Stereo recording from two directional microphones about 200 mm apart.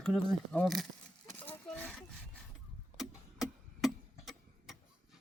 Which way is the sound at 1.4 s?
5° left (ahead or behind).